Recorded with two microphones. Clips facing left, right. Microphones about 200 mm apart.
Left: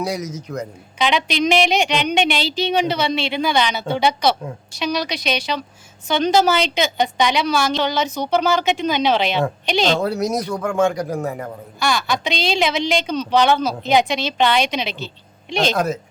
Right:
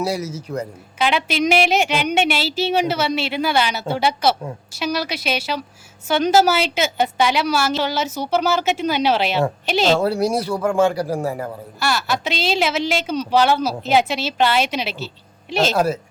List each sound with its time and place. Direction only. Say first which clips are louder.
0.2 s a woman's voice: right 1 dB; 10° right (ahead or behind)
10.0 s speech: right 2 dB; 30° right (ahead or behind)
11.8 s a woman's voice: left 1 dB; 5° right (ahead or behind)